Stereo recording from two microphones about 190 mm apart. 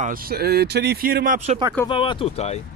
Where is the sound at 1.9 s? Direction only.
25° left (ahead or behind).